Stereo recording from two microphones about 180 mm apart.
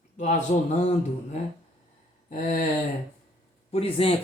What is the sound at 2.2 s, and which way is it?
Speech, 40° left (ahead or behind).